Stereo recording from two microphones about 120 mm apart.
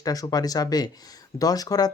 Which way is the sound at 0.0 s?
30° left (ahead or behind).